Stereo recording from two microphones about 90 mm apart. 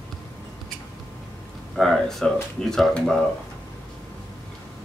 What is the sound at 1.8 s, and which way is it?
A man's voice, centre (ahead or behind).